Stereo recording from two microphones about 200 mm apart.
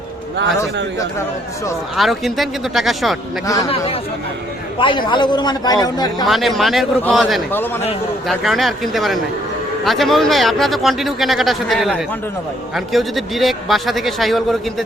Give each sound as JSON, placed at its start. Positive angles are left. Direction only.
{"t": 2.0, "sound": "speech", "side_deg": 0}
{"t": 3.4, "sound": "speech", "side_deg": 15}
{"t": 3.7, "sound": "a man's voice", "side_deg": 30}
{"t": 6.2, "sound": "speech", "side_deg": 0}
{"t": 7.5, "sound": "speech", "side_deg": 10}
{"t": 8.3, "sound": "speech", "side_deg": 0}